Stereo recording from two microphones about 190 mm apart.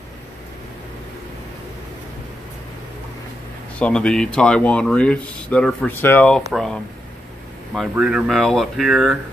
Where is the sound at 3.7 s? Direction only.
5° left (ahead or behind).